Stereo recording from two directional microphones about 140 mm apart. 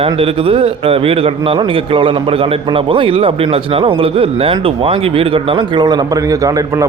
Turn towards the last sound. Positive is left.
turn(degrees=-25)  # may be behind; listen again after turning